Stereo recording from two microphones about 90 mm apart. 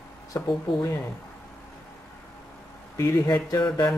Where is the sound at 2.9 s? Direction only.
35° left (ahead or behind).